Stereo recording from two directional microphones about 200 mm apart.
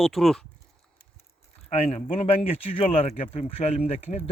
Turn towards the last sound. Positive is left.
turn(degrees=30)  # may be behind; listen again after turning